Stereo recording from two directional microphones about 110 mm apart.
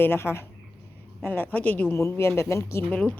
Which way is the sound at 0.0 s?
20° left (ahead or behind).